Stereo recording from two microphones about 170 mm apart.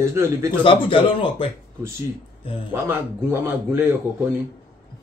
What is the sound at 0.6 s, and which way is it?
Speech, 30° left (ahead or behind).